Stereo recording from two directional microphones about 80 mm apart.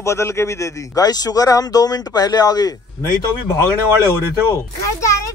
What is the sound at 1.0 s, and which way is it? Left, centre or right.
Speech, left.